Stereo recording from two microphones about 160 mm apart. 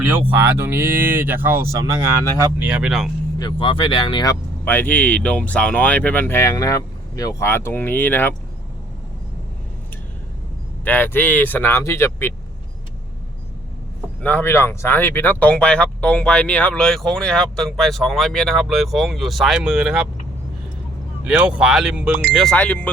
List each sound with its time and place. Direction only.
0.1 s speech: 10° right (ahead or behind)
3.3 s speech: 30° left (ahead or behind)
4.6 s speech: 10° left (ahead or behind)
10.8 s speech: 10° left (ahead or behind)
14.2 s speech: 10° left (ahead or behind); by 20.1 s 5° right (ahead or behind)
21.2 s speech: 5° right (ahead or behind); by 22.9 s 10° left (ahead or behind)